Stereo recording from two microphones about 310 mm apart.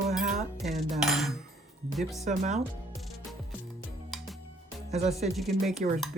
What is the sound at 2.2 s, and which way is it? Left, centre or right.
Speech, right.